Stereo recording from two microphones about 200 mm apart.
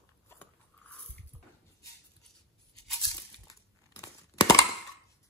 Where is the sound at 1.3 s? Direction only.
5° left (ahead or behind).